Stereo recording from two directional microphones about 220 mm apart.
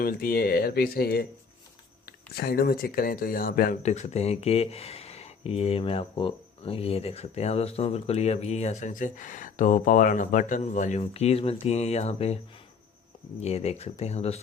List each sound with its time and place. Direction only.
0.0 s speech: 40° left (ahead or behind)
13.4 s speech: 30° left (ahead or behind)